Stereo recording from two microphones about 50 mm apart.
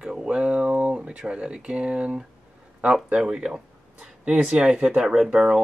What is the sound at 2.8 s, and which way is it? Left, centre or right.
Speech, right.